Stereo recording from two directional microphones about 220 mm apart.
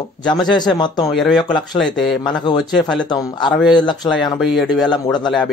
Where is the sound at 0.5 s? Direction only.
20° left (ahead or behind).